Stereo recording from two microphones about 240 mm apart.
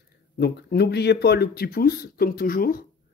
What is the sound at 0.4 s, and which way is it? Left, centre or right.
Speech, left.